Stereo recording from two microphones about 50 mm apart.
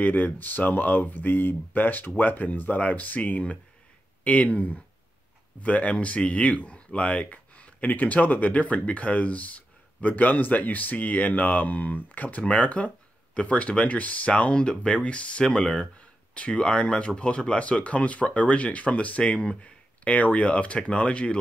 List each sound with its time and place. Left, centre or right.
0.0 s speech: left